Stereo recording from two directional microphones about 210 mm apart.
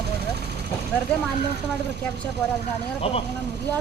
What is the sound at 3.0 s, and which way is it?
Speech, 30° left (ahead or behind).